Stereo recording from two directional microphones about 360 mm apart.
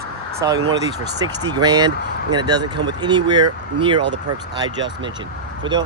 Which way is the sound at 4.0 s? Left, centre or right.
Right.